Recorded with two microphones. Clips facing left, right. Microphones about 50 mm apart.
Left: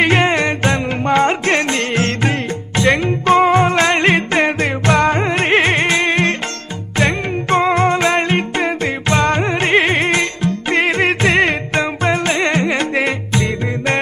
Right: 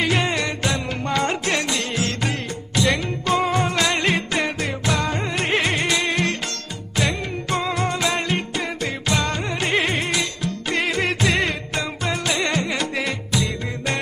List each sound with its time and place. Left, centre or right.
0.0 s music: left